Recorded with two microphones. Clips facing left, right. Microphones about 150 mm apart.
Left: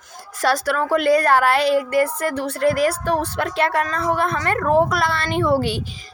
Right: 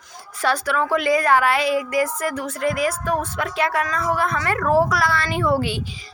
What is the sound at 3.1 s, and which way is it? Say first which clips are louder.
A woman's voice: left 2 dB; 30° left (ahead or behind).